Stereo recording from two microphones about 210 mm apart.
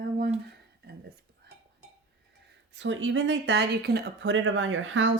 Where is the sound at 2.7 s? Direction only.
60° right (ahead or behind).